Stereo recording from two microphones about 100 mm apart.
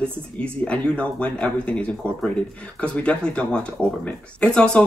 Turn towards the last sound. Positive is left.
turn(degrees=5)  # may be behind; listen again after turning